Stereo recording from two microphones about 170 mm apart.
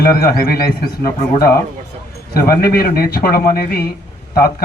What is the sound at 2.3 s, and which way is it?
Speech, 60° left (ahead or behind).